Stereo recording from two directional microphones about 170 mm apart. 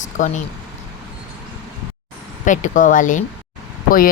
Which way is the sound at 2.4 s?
50° left (ahead or behind).